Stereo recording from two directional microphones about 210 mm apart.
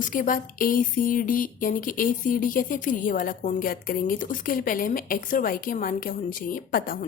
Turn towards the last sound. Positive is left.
turn(degrees=45)  # may be behind; listen again after turning